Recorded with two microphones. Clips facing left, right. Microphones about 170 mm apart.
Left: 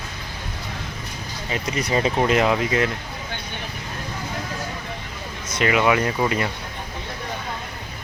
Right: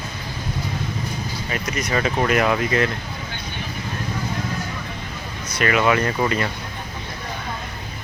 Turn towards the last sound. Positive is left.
turn(degrees=15)  # may be behind; listen again after turning